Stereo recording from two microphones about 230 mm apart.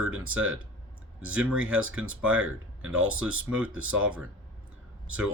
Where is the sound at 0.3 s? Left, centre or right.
Right.